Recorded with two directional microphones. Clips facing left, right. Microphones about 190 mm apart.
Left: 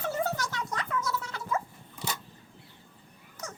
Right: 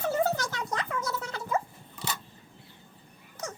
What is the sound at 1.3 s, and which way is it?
Dog, 30° right (ahead or behind).